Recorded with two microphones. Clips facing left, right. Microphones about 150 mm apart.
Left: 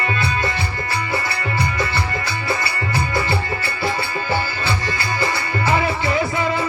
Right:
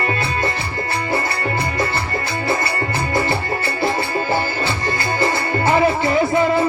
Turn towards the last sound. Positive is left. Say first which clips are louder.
# right 4 dB
turn(degrees=-50)  # may be behind; listen again after turning